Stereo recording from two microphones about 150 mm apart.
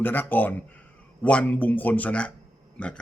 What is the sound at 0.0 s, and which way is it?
A man's voice, 10° left (ahead or behind).